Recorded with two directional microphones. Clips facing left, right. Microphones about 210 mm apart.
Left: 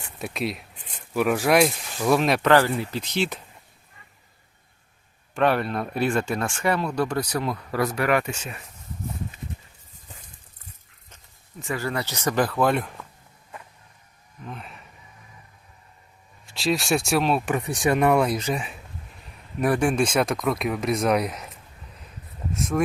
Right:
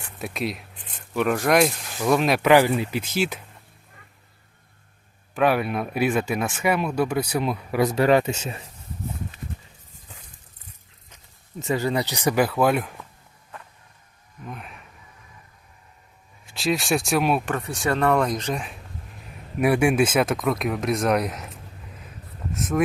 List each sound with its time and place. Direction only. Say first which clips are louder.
0.2 s speech: even; centre (ahead or behind)
2.5 s speech: right 4 dB; 15° right (ahead or behind)
5.3 s speech: right 1 dB; 5° right (ahead or behind); by 8.6 s 25° right (ahead or behind)
11.6 s speech: right 4 dB; 20° right (ahead or behind); by 13.1 s centre (ahead or behind)
14.4 s speech: even; centre (ahead or behind)
16.6 s speech: even; centre (ahead or behind)
17.5 s speech: left 2 dB; 15° left (ahead or behind); by 18.8 s centre (ahead or behind)
19.5 s speech: right 2 dB; 10° right (ahead or behind)
22.5 s speech: even; centre (ahead or behind)